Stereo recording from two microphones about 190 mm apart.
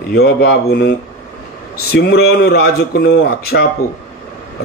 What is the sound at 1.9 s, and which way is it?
Speech, 55° left (ahead or behind).